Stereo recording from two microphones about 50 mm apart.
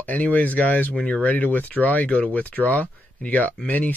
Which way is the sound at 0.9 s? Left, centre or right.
Centre.